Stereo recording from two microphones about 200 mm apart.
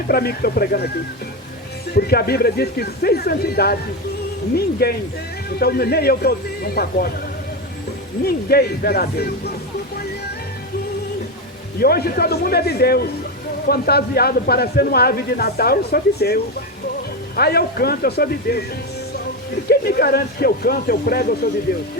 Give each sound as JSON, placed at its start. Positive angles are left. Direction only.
{"t": 0.1, "sound": "speech", "side_deg": 50}
{"t": 2.0, "sound": "speech", "side_deg": 50}
{"t": 8.2, "sound": "speech", "side_deg": 50}
{"t": 11.8, "sound": "speech", "side_deg": 50}
{"t": 19.6, "sound": "speech", "side_deg": 50}